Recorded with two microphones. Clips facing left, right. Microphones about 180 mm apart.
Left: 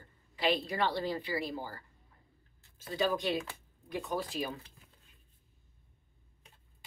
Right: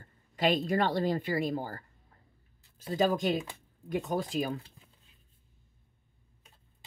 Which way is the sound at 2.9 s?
45° right (ahead or behind).